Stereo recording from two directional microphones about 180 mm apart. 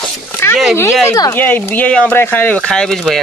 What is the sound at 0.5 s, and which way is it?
Speech, centre (ahead or behind).